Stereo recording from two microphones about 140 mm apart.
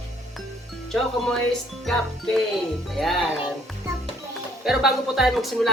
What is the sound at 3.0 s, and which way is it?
Speech, centre (ahead or behind).